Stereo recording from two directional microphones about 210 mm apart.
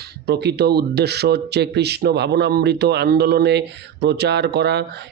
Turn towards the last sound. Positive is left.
turn(degrees=-55)  # may be behind; listen again after turning